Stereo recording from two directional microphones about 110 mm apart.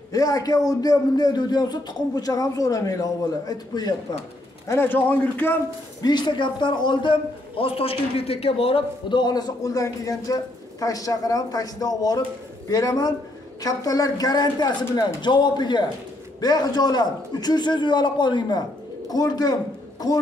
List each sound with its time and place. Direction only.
0.1 s a man's voice: 35° left (ahead or behind)
4.6 s a man's voice: 20° left (ahead or behind)
6.0 s a man's voice: 45° left (ahead or behind); by 9.2 s 60° left (ahead or behind)
9.2 s a man's voice: 35° left (ahead or behind)